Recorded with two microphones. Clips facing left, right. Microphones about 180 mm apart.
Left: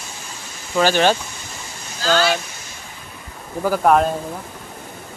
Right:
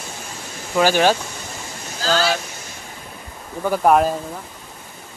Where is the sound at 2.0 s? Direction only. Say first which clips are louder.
Left 2 dB; 35° right (ahead or behind).